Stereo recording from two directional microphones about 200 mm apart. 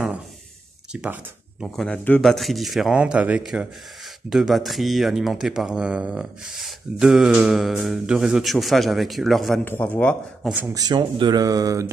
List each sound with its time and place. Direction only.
1.0 s speech: 5° right (ahead or behind)
10.5 s speech: 15° right (ahead or behind)